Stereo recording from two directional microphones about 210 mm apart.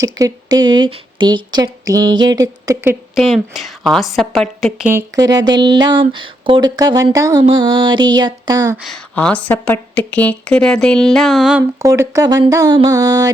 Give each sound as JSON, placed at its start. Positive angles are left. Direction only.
{"t": 0.0, "sound": "speech", "side_deg": -15}
{"t": 3.2, "sound": "speech", "side_deg": 0}
{"t": 4.9, "sound": "speech", "side_deg": -15}
{"t": 8.8, "sound": "speech", "side_deg": 5}
{"t": 11.8, "sound": "speech", "side_deg": -15}